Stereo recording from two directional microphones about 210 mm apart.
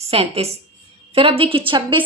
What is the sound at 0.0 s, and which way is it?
A woman's voice, 30° right (ahead or behind).